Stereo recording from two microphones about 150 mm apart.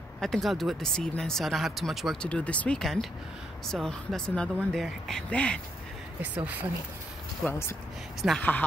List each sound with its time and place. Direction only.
0.2 s speech: centre (ahead or behind)
7.4 s speech: 15° left (ahead or behind)
8.2 s speech: 5° left (ahead or behind)